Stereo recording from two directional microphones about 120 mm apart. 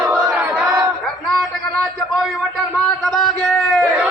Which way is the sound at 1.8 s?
Centre (ahead or behind).